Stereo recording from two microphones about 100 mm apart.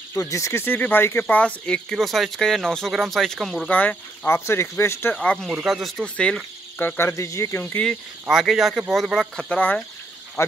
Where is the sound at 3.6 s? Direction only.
15° left (ahead or behind).